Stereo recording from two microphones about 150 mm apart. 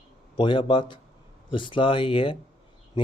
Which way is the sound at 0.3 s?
35° left (ahead or behind).